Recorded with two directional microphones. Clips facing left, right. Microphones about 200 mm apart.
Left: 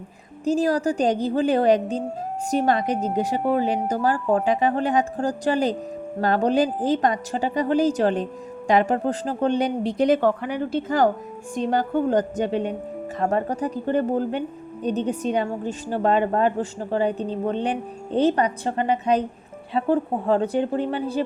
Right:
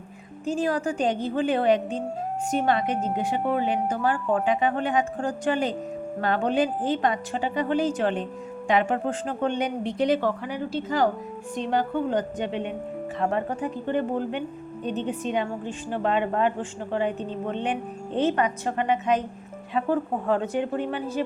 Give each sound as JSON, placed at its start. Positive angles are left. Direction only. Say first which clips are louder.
{"t": 0.4, "sound": "a woman's voice", "louder": "left 5 dB", "side_deg": 40}